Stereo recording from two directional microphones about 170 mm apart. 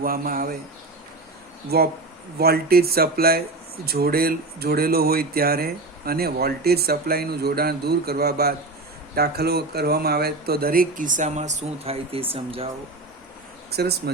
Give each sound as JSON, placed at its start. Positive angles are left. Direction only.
{"t": 0.0, "sound": "speech", "side_deg": -60}
{"t": 1.7, "sound": "speech", "side_deg": -65}
{"t": 13.7, "sound": "speech", "side_deg": -70}